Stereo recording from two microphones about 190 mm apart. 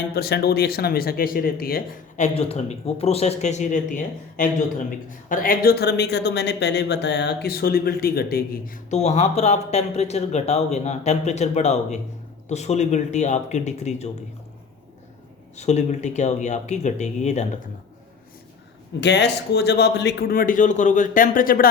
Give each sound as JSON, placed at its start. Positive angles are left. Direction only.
{"t": 0.1, "sound": "speech", "side_deg": 55}
{"t": 15.5, "sound": "speech", "side_deg": 35}
{"t": 18.9, "sound": "speech", "side_deg": 65}